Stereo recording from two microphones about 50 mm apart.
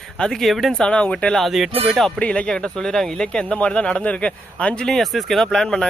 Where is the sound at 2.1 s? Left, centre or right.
Left.